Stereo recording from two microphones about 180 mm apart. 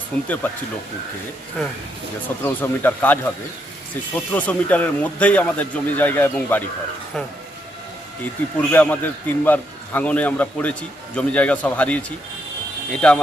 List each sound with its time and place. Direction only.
0.1 s a man's voice: 5° left (ahead or behind)
1.6 s speech: centre (ahead or behind)
2.4 s a man's voice: 10° left (ahead or behind)
8.7 s a man's voice: 10° left (ahead or behind)